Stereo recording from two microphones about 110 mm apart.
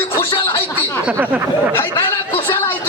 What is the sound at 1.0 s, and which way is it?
Speech, 20° right (ahead or behind).